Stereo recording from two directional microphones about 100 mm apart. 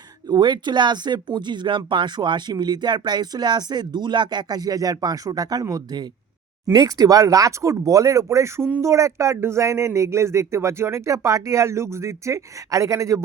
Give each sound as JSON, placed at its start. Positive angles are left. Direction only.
{"t": 0.3, "sound": "speech", "side_deg": -50}